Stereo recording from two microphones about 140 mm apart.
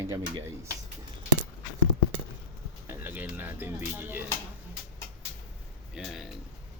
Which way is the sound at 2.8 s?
15° right (ahead or behind).